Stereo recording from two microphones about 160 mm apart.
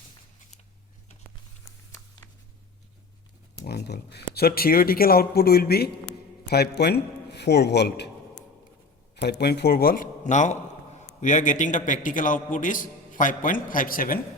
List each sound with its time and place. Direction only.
3.6 s speech: 90° left
6.5 s a man's voice: 90° left
9.2 s a man's voice: 90° left; by 14.2 s 60° left (ahead or behind)